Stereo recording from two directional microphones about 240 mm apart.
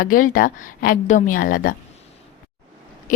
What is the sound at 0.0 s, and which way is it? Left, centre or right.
A woman's voice, left.